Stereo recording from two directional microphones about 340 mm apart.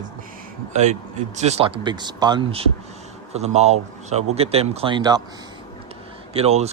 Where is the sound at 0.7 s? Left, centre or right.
Centre.